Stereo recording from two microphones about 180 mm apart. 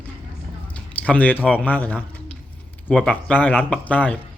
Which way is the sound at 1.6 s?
10° left (ahead or behind).